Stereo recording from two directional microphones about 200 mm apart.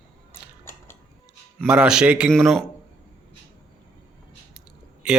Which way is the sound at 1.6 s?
5° right (ahead or behind).